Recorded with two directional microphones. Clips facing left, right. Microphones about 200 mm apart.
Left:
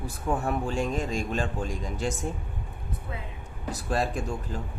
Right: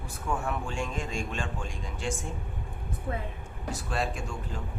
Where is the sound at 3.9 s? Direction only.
40° left (ahead or behind).